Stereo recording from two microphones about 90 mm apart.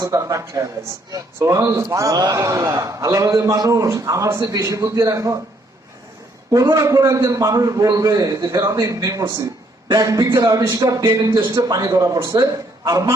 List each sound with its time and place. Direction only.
0.0 s a man's voice: 40° right (ahead or behind)
6.5 s a man's voice: 45° right (ahead or behind)